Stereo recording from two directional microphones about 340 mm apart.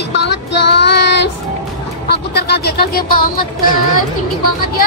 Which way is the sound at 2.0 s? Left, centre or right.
Left.